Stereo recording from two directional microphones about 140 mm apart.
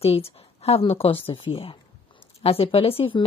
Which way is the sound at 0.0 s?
45° left (ahead or behind).